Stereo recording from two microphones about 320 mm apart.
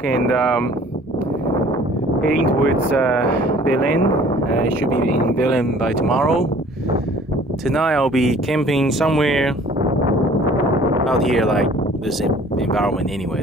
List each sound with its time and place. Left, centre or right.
2.2 s speech: right
3.7 s speech: right
5.5 s speech: centre
7.6 s speech: centre
11.1 s speech: centre